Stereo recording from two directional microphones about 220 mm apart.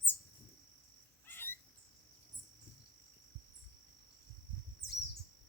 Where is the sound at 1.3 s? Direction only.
10° left (ahead or behind).